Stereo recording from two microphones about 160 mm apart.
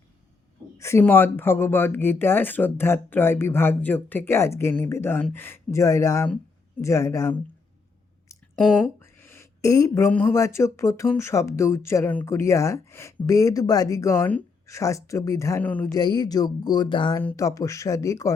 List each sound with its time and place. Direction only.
0.8 s speech: 15° left (ahead or behind)
9.0 s speech: 15° left (ahead or behind)
15.9 s speech: 25° left (ahead or behind)
17.2 s speech: 20° left (ahead or behind)